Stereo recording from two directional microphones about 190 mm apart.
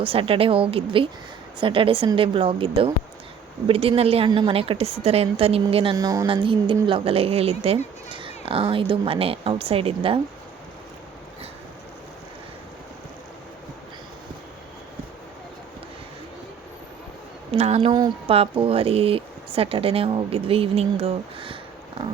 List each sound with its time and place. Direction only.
0.0 s speech: 30° right (ahead or behind)
17.5 s speech: 35° right (ahead or behind)